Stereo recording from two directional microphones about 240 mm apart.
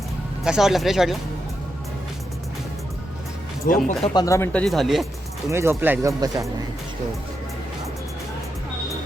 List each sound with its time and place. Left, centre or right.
0.4 s speech: centre
3.7 s speech: left
4.1 s speech: centre
5.5 s speech: centre